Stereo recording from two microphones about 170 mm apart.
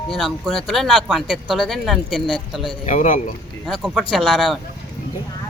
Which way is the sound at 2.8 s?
45° left (ahead or behind).